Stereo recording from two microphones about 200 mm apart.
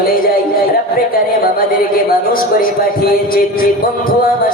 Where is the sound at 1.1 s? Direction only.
45° left (ahead or behind).